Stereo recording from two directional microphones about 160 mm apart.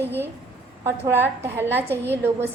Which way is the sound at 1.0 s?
15° right (ahead or behind).